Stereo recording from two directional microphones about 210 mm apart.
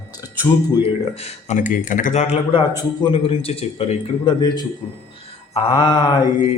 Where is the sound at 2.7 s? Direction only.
20° left (ahead or behind).